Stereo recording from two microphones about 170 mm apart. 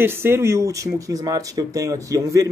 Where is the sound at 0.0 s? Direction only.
15° right (ahead or behind).